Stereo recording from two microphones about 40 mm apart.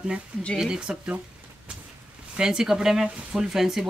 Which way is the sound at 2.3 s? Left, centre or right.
Centre.